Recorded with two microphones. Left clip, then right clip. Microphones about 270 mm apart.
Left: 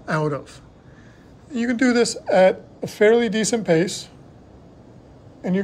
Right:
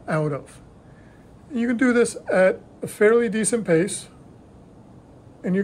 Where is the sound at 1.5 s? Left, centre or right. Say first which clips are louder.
Left 1 dB; centre.